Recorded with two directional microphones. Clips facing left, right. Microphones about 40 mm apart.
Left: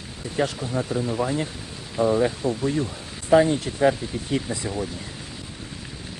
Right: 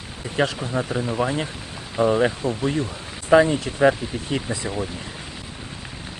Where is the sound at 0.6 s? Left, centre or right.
Right.